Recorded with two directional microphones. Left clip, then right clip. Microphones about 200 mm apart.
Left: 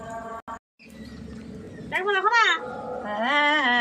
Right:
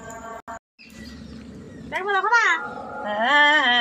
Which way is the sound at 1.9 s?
15° left (ahead or behind).